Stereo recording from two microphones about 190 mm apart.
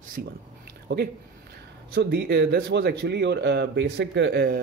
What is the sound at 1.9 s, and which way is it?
Speech, 60° right (ahead or behind).